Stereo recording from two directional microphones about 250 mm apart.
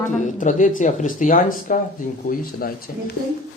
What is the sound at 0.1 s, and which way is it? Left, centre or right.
Speech, left.